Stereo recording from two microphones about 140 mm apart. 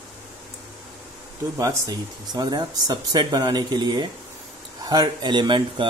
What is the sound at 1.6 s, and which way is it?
Speech, 25° right (ahead or behind).